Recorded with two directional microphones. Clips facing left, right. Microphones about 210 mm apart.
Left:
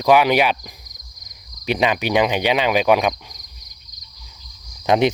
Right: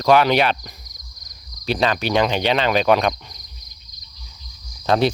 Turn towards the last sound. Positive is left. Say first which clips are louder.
# left 1 dB
turn(degrees=15)  # may be behind; listen again after turning